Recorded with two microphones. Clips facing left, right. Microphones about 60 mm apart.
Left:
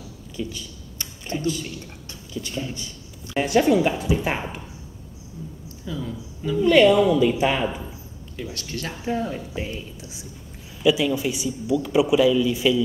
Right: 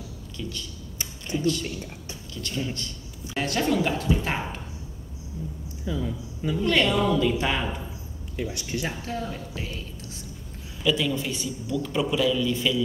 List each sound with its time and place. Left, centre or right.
0.4 s a woman's voice: centre
1.3 s speech: left
2.3 s a woman's voice: centre
5.9 s speech: centre
6.6 s a woman's voice: centre
8.4 s speech: centre
9.0 s a woman's voice: centre